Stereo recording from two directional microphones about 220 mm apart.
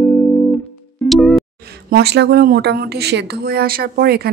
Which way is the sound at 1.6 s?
45° right (ahead or behind).